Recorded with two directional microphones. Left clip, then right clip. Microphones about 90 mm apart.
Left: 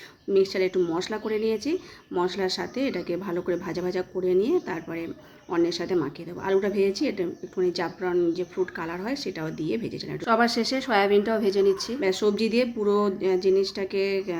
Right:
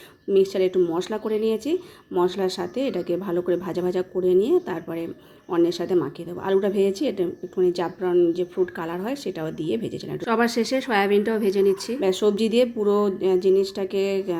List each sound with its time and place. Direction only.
0.3 s speech: 25° right (ahead or behind)